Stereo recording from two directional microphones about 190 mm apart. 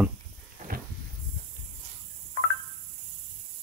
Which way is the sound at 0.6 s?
40° right (ahead or behind).